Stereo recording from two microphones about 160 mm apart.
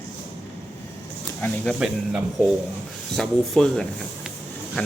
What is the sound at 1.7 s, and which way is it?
Speech, 5° right (ahead or behind).